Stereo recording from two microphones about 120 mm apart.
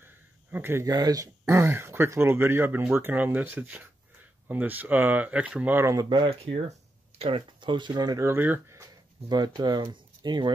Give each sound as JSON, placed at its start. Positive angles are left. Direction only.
{"t": 0.0, "sound": "a sound", "side_deg": -15}
{"t": 0.8, "sound": "speech", "side_deg": -30}
{"t": 5.9, "sound": "speech", "side_deg": -40}
{"t": 9.3, "sound": "speech", "side_deg": -35}